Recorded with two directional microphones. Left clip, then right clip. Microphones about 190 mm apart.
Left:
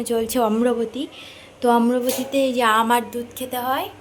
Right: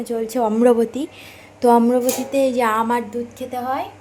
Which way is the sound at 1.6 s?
15° right (ahead or behind).